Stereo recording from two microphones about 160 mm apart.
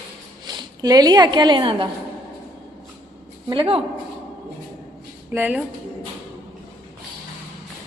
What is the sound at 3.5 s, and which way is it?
Speech, 35° right (ahead or behind).